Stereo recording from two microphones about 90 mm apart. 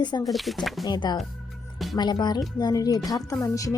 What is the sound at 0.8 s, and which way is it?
A woman's voice, 50° left (ahead or behind).